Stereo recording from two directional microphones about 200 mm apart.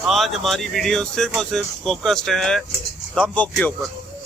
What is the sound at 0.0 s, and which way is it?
Speech, centre (ahead or behind).